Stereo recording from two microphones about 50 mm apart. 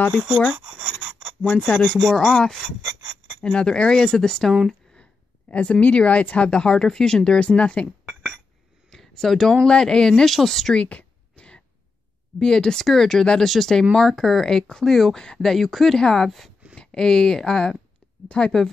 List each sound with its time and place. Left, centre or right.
0.1 s speech: centre
0.5 s a sound: centre
1.4 s speech: centre
5.5 s speech: left
8.9 s speech: centre
10.7 s a sound: left
12.4 s speech: centre
16.0 s speech: centre
16.3 s speech: centre
16.7 s speech: centre
18.3 s speech: left